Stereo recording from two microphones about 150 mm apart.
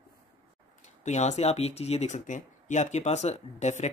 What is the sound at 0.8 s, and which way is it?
Speech, 50° left (ahead or behind).